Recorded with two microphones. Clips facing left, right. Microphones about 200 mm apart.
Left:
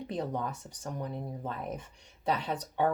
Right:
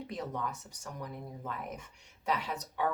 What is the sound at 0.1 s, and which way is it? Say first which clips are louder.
Speech: left 5 dB; 30° left (ahead or behind).